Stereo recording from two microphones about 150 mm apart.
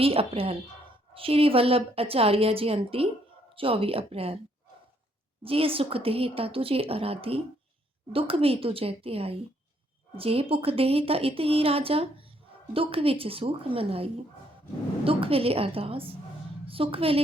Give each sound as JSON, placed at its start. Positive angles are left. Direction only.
{"t": 0.0, "sound": "speech", "side_deg": -40}
{"t": 5.4, "sound": "speech", "side_deg": -40}